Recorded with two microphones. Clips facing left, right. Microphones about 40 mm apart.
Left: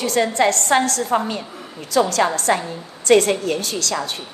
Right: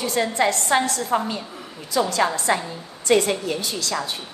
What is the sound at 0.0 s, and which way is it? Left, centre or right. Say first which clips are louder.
A woman's voice: left 3 dB; left.